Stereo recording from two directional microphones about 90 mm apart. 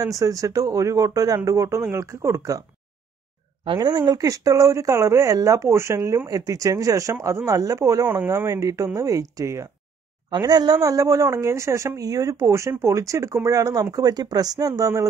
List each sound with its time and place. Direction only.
0.0 s speech: 40° right (ahead or behind)
3.7 s speech: 50° right (ahead or behind)
4.2 s speech: 40° right (ahead or behind)
10.3 s speech: 50° right (ahead or behind)